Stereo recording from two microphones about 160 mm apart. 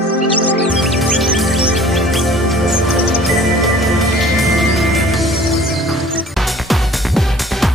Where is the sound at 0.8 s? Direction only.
Centre (ahead or behind).